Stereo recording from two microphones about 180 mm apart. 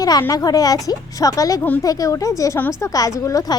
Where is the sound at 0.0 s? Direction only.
20° left (ahead or behind).